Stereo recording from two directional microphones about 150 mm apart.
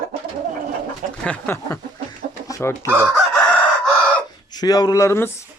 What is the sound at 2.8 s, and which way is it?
Chicken, 15° right (ahead or behind).